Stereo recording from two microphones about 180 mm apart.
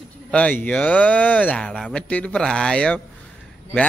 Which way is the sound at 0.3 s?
5° left (ahead or behind).